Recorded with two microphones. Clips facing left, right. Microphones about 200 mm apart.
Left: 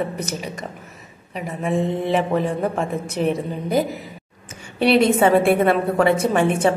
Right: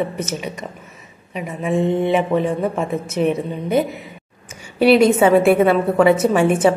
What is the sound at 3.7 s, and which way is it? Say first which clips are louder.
Speech: right 2 dB; 35° left (ahead or behind).